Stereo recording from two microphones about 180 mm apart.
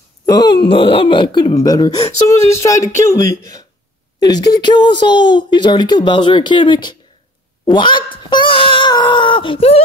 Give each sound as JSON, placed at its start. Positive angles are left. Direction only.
{"t": 0.3, "sound": "speech", "side_deg": 25}